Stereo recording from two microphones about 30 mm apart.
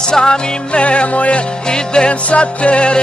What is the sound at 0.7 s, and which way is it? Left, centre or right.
Music, left.